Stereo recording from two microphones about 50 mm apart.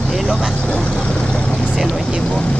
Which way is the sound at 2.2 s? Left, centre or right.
Left.